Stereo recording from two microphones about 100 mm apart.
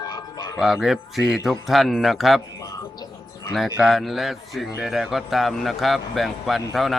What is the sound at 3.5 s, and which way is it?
A man's voice, centre (ahead or behind).